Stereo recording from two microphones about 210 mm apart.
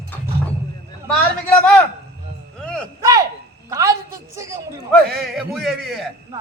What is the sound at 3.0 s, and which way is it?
A woman's voice, 15° right (ahead or behind).